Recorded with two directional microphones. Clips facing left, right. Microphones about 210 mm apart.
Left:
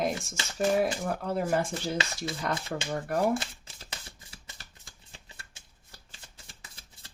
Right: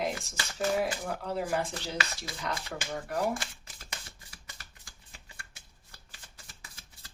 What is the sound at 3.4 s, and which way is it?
Shuffling cards, 30° left (ahead or behind).